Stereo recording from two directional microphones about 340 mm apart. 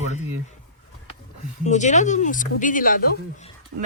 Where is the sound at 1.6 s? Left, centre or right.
Left.